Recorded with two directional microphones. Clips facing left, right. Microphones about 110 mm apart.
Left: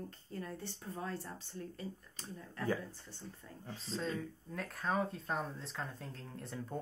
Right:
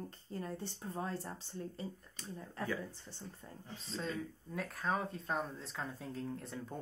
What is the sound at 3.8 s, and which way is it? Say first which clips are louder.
Speech: left 1 dB; centre (ahead or behind).